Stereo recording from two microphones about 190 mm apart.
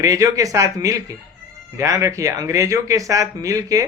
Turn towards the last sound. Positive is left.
turn(degrees=-15)  # may be behind; listen again after turning